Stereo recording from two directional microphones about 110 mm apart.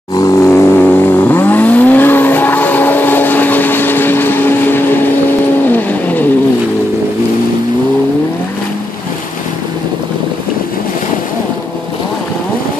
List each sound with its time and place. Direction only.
0.2 s vehicle: 30° left (ahead or behind)